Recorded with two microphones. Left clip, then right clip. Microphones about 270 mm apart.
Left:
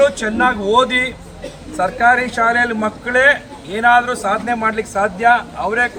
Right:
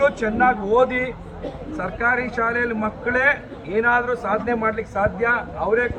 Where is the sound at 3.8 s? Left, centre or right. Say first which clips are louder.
Left 6 dB; left.